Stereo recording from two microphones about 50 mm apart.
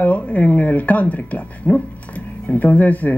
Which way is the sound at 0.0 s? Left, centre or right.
Left.